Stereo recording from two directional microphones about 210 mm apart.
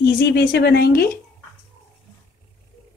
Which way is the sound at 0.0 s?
50° left (ahead or behind).